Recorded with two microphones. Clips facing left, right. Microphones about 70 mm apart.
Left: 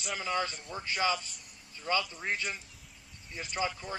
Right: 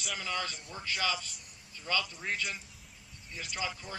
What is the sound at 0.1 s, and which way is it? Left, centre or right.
A man's voice, left.